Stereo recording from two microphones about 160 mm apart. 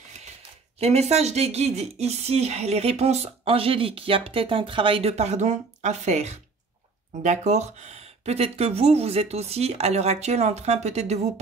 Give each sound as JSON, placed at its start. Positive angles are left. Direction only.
{"t": 0.7, "sound": "speech", "side_deg": -40}